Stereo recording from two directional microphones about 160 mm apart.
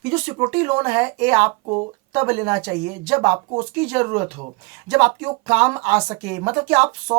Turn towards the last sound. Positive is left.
turn(degrees=-15)  # may be behind; listen again after turning